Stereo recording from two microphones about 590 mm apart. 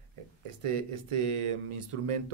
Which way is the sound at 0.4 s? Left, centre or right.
Right.